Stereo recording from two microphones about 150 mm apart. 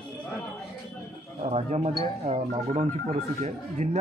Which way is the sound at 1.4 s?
45° right (ahead or behind).